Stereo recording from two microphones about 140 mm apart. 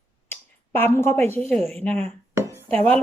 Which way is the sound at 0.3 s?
15° left (ahead or behind).